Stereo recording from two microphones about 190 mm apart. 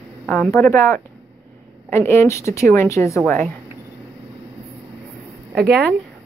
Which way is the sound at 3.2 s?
5° left (ahead or behind).